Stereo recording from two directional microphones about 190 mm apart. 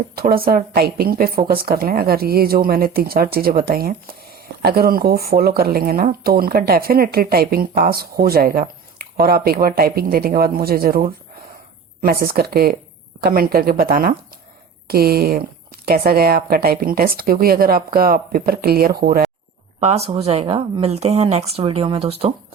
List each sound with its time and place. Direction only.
0.2 s a woman's voice: 50° right (ahead or behind)
19.8 s speech: 35° right (ahead or behind)